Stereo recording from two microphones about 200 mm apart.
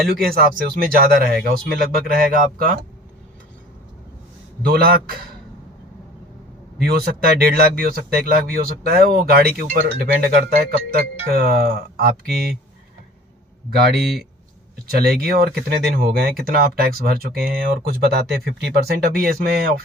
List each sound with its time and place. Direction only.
0.2 s speech: 50° right (ahead or behind)
4.6 s speech: 50° right (ahead or behind)
6.8 s speech: 50° right (ahead or behind)
13.7 s speech: 55° right (ahead or behind)